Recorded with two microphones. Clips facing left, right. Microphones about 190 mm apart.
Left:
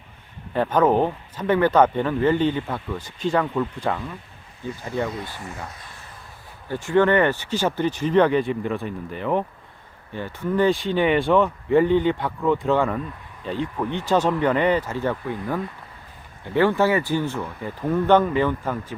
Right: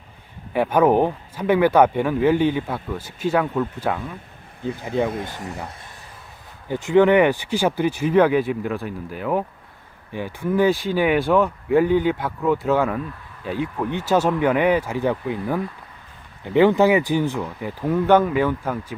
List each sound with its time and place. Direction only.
0.5 s speech: 10° right (ahead or behind)
5.0 s speech: 50° right (ahead or behind)
6.7 s speech: 15° right (ahead or behind)